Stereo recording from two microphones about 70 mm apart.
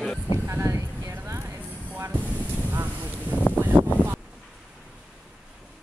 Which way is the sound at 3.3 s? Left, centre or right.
Left.